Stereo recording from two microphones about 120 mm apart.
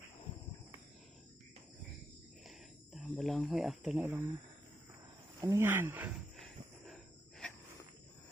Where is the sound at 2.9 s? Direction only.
Centre (ahead or behind).